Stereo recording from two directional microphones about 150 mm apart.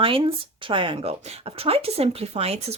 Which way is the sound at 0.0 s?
35° right (ahead or behind).